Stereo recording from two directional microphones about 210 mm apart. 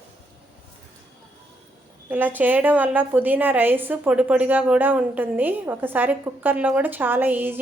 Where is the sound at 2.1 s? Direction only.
10° right (ahead or behind).